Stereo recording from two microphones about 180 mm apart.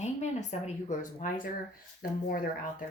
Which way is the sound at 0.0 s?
40° left (ahead or behind).